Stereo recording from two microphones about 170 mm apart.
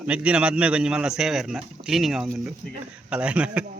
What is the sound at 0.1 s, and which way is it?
A man's voice, 5° right (ahead or behind).